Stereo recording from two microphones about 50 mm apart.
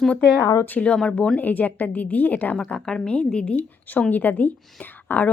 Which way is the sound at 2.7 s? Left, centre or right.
Centre.